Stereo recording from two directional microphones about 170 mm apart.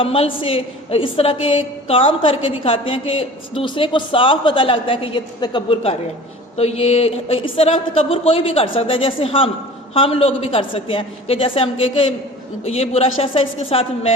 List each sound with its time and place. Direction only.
0.0 s a woman's voice: 35° left (ahead or behind)